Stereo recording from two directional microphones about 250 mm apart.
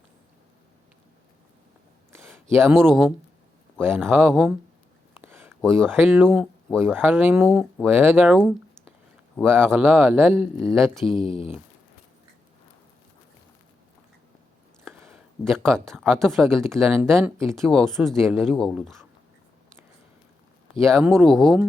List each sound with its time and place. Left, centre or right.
2.1 s a sound: centre
2.7 s speech: centre
5.2 s a sound: centre
5.6 s speech: centre
6.0 s speech: centre
11.0 s speech: left
15.0 s speech: centre
20.7 s speech: centre